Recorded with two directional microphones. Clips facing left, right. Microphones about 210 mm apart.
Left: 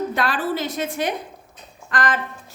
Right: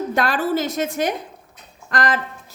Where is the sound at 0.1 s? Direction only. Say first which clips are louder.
Right 3 dB; 45° right (ahead or behind).